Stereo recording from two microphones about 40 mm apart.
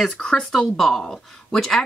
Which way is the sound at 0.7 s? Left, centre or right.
Centre.